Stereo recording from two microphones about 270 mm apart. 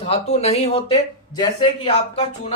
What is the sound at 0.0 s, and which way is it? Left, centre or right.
Speech, left.